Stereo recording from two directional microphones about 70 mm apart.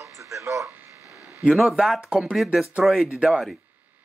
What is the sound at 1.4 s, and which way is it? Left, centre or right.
Speech, centre.